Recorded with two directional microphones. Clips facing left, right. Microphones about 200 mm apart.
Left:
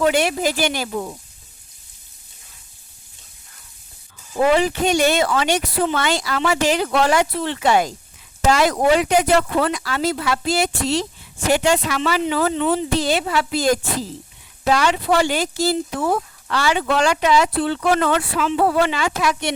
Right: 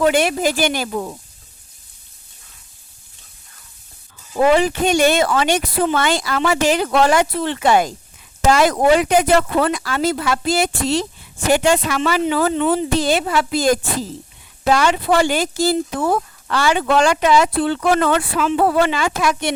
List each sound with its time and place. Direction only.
0.0 s speech: 50° right (ahead or behind)
4.5 s speech: 50° right (ahead or behind)